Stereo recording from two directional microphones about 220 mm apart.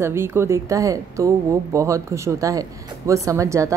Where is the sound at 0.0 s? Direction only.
10° right (ahead or behind).